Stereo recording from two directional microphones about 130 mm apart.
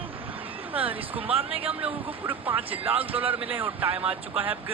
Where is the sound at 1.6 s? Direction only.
10° right (ahead or behind).